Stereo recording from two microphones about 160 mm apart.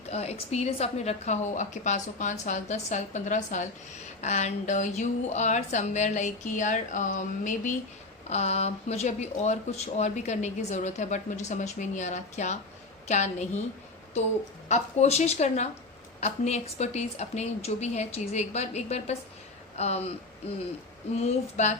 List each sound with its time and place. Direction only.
0.1 s speech: 40° left (ahead or behind)
14.7 s speech: 45° left (ahead or behind)
21.2 s speech: 45° left (ahead or behind)